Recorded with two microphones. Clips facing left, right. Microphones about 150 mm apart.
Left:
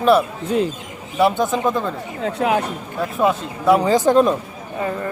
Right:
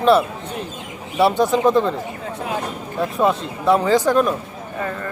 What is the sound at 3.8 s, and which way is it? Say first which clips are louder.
Speech: left 2 dB; 20° left (ahead or behind).